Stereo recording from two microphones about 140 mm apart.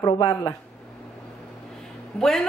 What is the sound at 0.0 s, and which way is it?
Speech, 30° left (ahead or behind).